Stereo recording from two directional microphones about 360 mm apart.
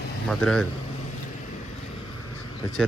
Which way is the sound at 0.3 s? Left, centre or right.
Centre.